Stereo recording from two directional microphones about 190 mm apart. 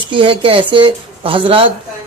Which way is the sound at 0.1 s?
25° right (ahead or behind).